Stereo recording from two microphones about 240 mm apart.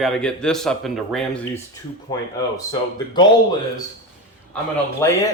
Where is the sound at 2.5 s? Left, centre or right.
Centre.